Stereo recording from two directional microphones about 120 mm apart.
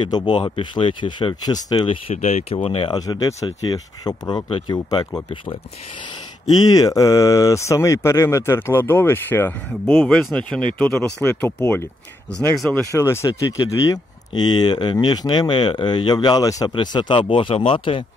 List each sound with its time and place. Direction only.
0.0 s speech: 40° left (ahead or behind)
1.9 s speech: 55° left (ahead or behind)
2.9 s speech: 35° left (ahead or behind)
6.5 s speech: 30° left (ahead or behind)
9.9 s speech: 5° left (ahead or behind)
11.2 s speech: 20° left (ahead or behind)
16.7 s speech: 40° left (ahead or behind)